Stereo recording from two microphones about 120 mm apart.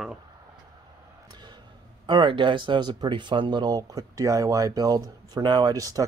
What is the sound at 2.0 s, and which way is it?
Speech, 40° right (ahead or behind).